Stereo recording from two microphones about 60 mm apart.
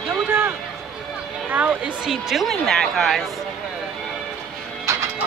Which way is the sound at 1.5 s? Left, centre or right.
Right.